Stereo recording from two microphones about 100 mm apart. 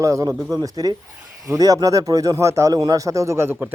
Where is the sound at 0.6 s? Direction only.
40° right (ahead or behind).